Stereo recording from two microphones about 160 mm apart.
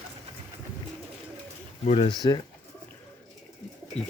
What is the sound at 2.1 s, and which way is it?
Speech, 25° left (ahead or behind).